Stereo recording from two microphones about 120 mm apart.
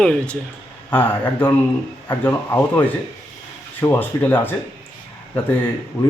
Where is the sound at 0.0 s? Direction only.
5° left (ahead or behind).